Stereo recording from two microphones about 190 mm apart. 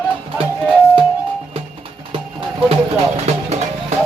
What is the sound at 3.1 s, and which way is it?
Music, 35° right (ahead or behind).